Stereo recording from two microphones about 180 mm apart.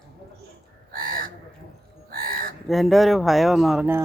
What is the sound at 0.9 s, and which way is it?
Crow, 50° right (ahead or behind).